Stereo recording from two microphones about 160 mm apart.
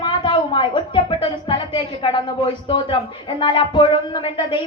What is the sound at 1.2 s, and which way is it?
A woman's voice, 30° left (ahead or behind).